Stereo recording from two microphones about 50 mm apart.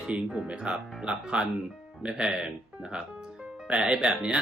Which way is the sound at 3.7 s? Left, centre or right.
Centre.